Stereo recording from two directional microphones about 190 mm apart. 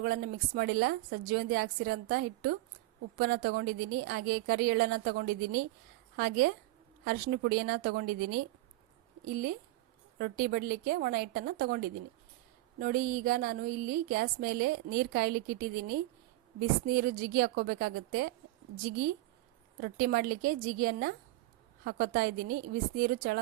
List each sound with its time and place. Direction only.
0.0 s a woman's voice: 50° right (ahead or behind)